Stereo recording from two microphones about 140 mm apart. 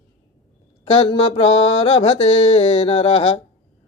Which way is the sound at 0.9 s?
40° left (ahead or behind).